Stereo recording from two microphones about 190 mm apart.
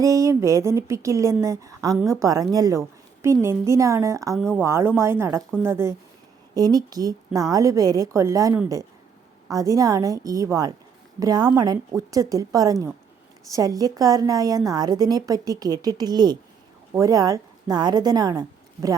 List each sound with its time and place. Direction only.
0.0 s a woman's voice: 15° right (ahead or behind)
4.4 s speech: 5° right (ahead or behind)
4.6 s a woman's voice: 15° right (ahead or behind)